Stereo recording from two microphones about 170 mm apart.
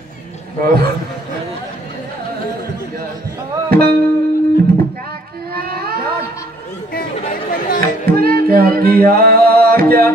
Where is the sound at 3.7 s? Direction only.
65° right (ahead or behind).